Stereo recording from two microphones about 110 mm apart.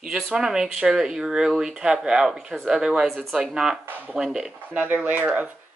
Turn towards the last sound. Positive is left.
turn(degrees=-15)  # may be behind; listen again after turning